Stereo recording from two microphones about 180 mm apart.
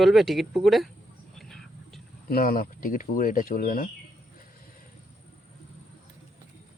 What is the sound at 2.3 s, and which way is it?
Speech, 55° left (ahead or behind).